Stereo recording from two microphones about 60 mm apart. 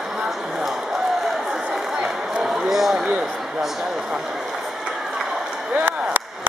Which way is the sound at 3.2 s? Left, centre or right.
Centre.